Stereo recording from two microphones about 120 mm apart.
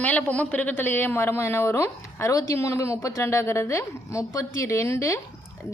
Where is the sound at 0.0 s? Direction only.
10° left (ahead or behind).